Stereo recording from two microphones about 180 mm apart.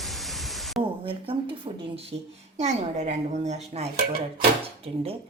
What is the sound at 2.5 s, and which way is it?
Speech, 40° right (ahead or behind).